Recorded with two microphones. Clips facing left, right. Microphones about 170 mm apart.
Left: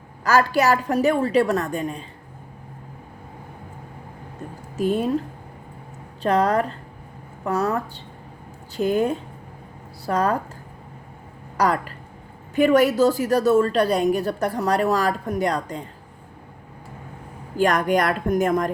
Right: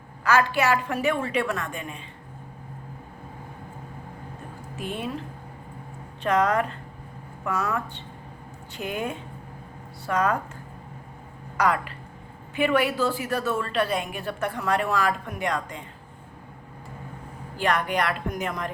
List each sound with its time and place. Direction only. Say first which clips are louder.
0.3 s a woman's voice: left 3 dB; 40° left (ahead or behind)
4.8 s a woman's voice: left 10 dB; 40° left (ahead or behind)
6.2 s a woman's voice: left 3 dB; 35° left (ahead or behind)
11.5 s a woman's voice: left 3 dB; 35° left (ahead or behind)
17.6 s a woman's voice: left 6 dB; 45° left (ahead or behind)